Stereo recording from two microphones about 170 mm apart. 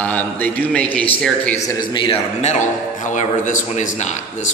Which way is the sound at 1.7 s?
25° left (ahead or behind).